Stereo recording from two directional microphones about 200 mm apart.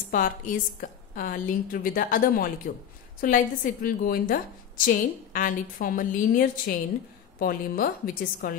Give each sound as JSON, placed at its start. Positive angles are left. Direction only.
{"t": 0.1, "sound": "a woman's voice", "side_deg": 40}